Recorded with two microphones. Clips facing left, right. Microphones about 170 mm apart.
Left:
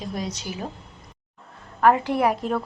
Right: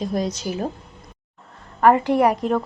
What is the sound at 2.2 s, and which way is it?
Speech, centre (ahead or behind).